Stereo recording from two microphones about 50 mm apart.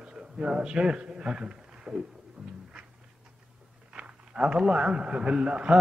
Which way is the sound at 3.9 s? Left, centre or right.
Right.